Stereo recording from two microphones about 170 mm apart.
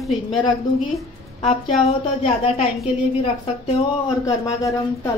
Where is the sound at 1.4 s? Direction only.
35° left (ahead or behind).